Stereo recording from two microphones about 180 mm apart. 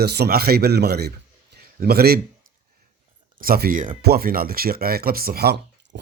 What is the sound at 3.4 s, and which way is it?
Speech, 55° right (ahead or behind).